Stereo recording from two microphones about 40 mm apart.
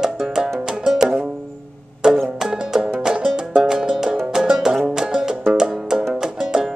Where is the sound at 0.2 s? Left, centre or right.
Centre.